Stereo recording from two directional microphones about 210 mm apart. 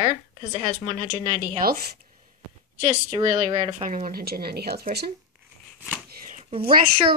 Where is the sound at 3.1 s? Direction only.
25° right (ahead or behind).